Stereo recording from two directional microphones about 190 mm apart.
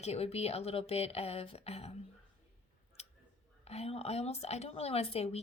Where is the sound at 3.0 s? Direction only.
35° left (ahead or behind).